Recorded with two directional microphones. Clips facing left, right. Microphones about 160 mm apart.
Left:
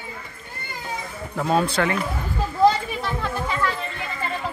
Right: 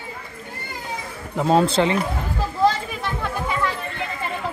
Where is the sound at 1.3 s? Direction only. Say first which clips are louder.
Right 4 dB; 25° right (ahead or behind).